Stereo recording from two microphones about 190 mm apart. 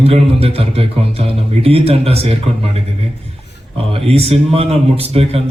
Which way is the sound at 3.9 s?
30° right (ahead or behind).